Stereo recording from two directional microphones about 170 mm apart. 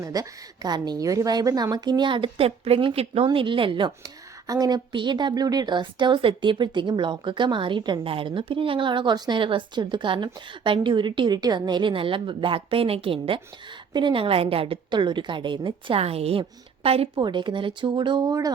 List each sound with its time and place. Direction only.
0.0 s a woman's voice: 20° right (ahead or behind)